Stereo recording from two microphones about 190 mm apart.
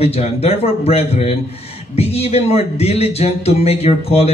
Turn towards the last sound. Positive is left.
turn(degrees=30)  # may be behind; listen again after turning